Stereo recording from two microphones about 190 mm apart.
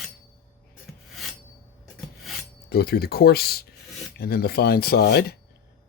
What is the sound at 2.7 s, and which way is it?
Speech, 55° left (ahead or behind).